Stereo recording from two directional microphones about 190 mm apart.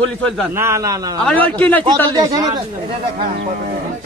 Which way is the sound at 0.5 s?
15° right (ahead or behind).